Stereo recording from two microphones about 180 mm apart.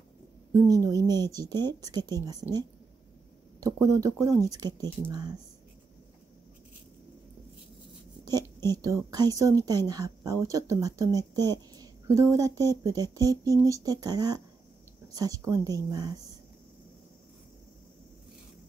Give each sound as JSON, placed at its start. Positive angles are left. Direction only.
{"t": 0.5, "sound": "speech", "side_deg": -20}
{"t": 2.4, "sound": "speech", "side_deg": -10}
{"t": 3.8, "sound": "speech", "side_deg": -20}
{"t": 8.8, "sound": "speech", "side_deg": -20}